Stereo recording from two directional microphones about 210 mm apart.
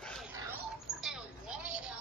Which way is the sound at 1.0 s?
5° right (ahead or behind).